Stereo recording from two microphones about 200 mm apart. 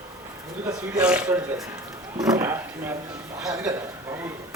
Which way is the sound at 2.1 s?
15° right (ahead or behind).